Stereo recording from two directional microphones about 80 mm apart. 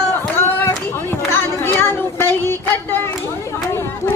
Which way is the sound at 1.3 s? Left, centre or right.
Left.